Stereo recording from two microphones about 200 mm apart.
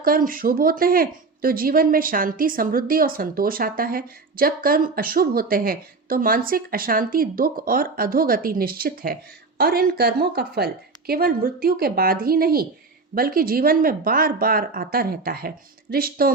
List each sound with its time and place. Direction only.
0.0 s speech: 45° right (ahead or behind)